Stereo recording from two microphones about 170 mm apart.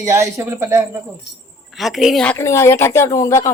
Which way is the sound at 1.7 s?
Centre (ahead or behind).